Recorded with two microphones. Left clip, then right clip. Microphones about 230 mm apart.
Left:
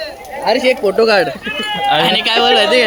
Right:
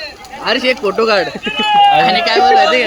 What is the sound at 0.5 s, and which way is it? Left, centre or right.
Speech, right.